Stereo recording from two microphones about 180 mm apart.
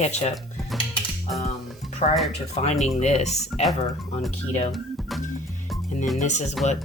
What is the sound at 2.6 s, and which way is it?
Speech, 35° left (ahead or behind).